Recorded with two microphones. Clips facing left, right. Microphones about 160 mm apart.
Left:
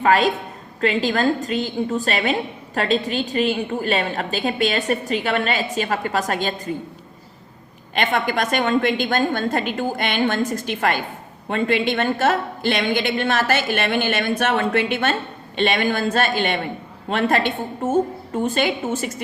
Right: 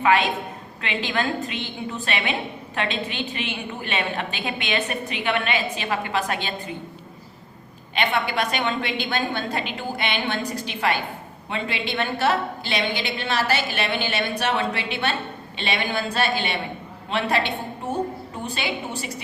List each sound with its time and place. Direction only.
0.0 s a woman's voice: 40° left (ahead or behind)
7.9 s a woman's voice: 45° left (ahead or behind)